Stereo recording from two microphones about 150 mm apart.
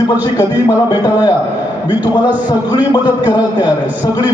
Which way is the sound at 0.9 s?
25° left (ahead or behind).